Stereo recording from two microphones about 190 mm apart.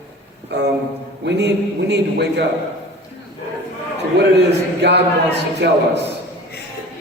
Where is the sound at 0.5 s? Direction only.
65° right (ahead or behind).